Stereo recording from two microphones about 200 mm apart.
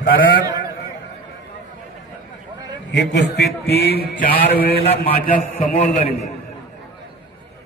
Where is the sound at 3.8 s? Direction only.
50° left (ahead or behind).